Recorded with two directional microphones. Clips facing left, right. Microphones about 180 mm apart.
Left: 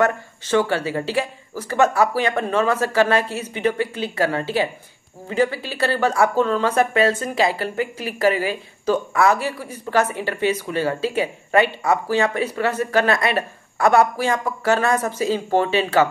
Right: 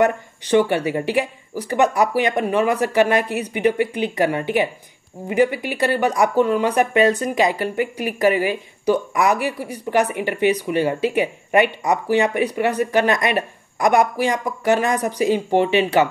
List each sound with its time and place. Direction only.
0.0 s speech: 15° right (ahead or behind)